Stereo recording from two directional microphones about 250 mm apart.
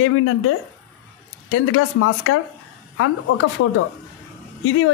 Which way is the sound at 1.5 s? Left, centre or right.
Left.